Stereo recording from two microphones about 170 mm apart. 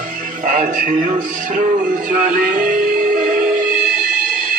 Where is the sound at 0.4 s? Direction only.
50° right (ahead or behind).